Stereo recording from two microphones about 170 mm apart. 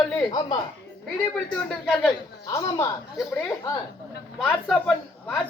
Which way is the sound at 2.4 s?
20° left (ahead or behind).